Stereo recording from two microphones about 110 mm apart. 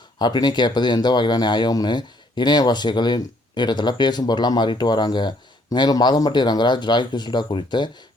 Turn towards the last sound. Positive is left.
turn(degrees=45)  # may be behind; listen again after turning